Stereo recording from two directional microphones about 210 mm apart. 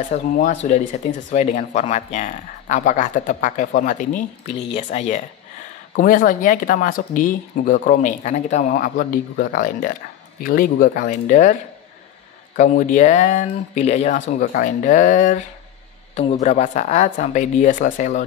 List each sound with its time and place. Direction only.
0.1 s speech: 35° left (ahead or behind)
4.6 s speech: 30° left (ahead or behind)
12.5 s speech: 35° left (ahead or behind)
14.2 s speech: 45° left (ahead or behind)